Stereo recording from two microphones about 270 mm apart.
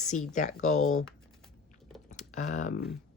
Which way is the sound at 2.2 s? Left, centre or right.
Left.